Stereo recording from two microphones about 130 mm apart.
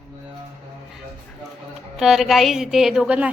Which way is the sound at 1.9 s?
5° right (ahead or behind).